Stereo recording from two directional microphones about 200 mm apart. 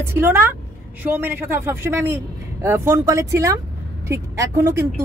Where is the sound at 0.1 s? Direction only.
10° right (ahead or behind).